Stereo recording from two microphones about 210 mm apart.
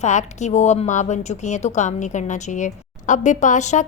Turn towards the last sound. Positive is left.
turn(degrees=35)  # may be behind; listen again after turning